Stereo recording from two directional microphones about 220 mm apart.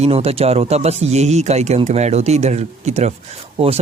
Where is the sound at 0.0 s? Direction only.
25° right (ahead or behind).